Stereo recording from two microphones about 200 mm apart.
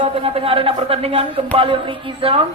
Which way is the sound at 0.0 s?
30° right (ahead or behind).